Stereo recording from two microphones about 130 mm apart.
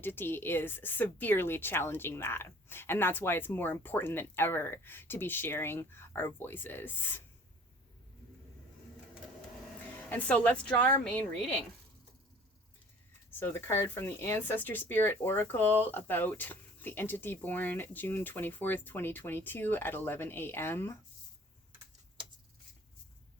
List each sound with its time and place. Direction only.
0.0 s speech: 15° left (ahead or behind)
10.1 s speech: 10° left (ahead or behind)
13.4 s speech: 20° left (ahead or behind)